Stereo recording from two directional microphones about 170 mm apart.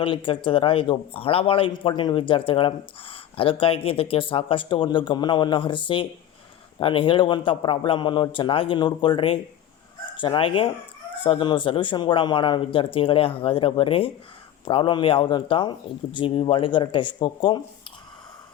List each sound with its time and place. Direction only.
0.0 s speech: 30° left (ahead or behind)